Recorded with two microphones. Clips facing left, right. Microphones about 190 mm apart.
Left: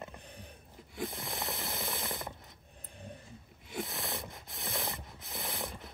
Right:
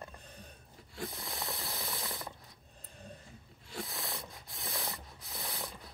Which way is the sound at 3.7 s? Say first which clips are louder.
Left 3 dB; 20° left (ahead or behind).